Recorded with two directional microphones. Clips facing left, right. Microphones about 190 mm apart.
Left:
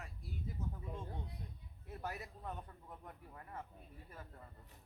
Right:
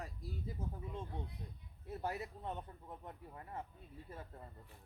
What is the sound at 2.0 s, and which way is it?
A man's voice, 25° right (ahead or behind).